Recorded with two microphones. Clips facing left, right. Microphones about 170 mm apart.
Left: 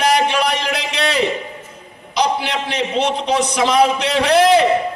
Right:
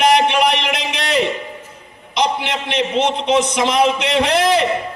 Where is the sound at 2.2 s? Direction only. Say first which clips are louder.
Left 1 dB; 20° right (ahead or behind).